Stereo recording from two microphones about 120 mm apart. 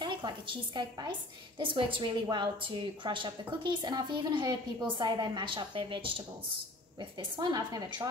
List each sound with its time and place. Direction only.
0.0 s a woman's voice: 40° right (ahead or behind)